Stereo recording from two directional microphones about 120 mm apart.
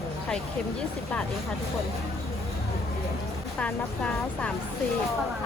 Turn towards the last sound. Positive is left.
turn(degrees=10)  # may be behind; listen again after turning